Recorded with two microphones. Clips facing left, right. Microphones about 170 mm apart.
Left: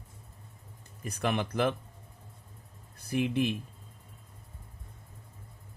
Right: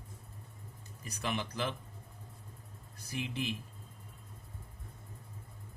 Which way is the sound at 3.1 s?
55° left (ahead or behind).